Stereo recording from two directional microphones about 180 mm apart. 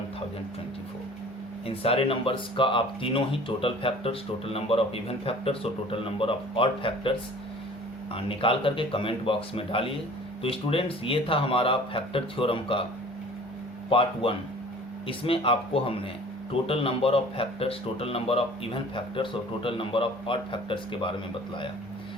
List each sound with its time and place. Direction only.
1.6 s speech: 30° left (ahead or behind)
13.9 s speech: 30° left (ahead or behind)